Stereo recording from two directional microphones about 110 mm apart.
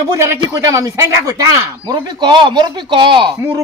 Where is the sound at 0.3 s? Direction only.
25° right (ahead or behind); by 3.3 s 45° right (ahead or behind).